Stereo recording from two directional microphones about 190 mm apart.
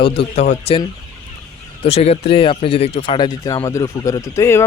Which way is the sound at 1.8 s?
35° left (ahead or behind).